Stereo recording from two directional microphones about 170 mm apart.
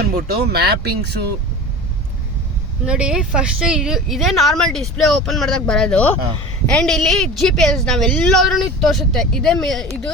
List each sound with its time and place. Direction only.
0.1 s speech: 60° right (ahead or behind)
2.8 s a woman's voice: 5° right (ahead or behind)